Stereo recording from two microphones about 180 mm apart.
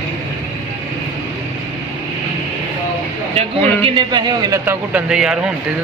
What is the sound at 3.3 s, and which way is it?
Speech, 35° right (ahead or behind).